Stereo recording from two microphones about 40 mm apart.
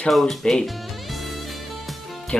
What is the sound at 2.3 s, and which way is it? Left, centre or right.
Speech, left.